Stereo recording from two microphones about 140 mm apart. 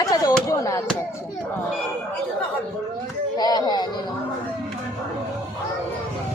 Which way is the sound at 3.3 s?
30° left (ahead or behind).